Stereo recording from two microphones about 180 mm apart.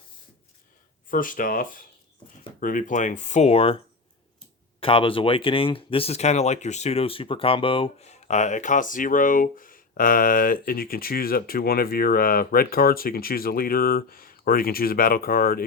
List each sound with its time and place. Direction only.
1.1 s speech: 50° left (ahead or behind); by 3.8 s 35° left (ahead or behind)
4.8 s speech: 30° left (ahead or behind); by 15.6 s 55° left (ahead or behind)